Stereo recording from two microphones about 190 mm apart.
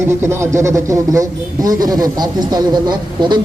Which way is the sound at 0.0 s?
15° right (ahead or behind).